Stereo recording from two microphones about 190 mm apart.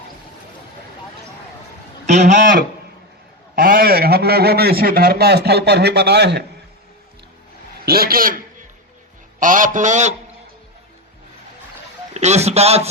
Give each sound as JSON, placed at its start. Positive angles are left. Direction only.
{"t": 2.0, "sound": "a man's voice", "side_deg": -40}
{"t": 7.9, "sound": "a man's voice", "side_deg": -50}
{"t": 9.4, "sound": "a man's voice", "side_deg": -45}
{"t": 12.1, "sound": "a man's voice", "side_deg": -35}